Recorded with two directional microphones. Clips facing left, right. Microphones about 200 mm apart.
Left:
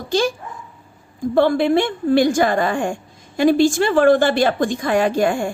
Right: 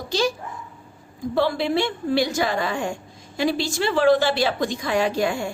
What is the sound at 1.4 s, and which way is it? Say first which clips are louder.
A woman's voice: left 6 dB; 50° left (ahead or behind).